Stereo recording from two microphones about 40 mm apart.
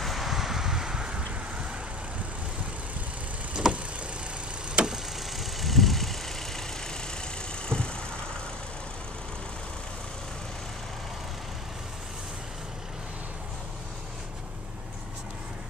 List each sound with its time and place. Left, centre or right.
0.0 s wind: centre; by 1.2 s right
3.6 s vehicle: centre
4.8 s vehicle: right
5.4 s vehicle: centre
7.6 s vehicle: left